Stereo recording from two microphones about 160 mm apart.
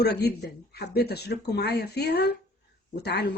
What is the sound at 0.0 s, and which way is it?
Speech, 90° left.